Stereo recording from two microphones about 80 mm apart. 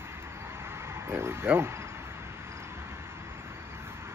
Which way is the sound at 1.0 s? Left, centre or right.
Right.